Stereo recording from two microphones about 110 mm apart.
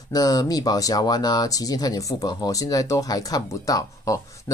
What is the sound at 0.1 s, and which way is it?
Speech, 35° left (ahead or behind).